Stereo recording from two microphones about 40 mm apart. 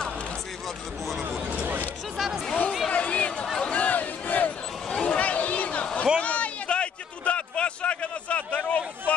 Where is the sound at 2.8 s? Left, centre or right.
Left.